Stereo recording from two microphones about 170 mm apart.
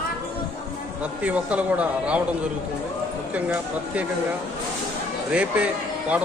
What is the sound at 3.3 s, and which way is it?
Speech, 10° right (ahead or behind).